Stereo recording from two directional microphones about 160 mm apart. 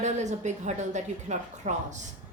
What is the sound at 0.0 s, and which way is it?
A woman's voice, 45° right (ahead or behind).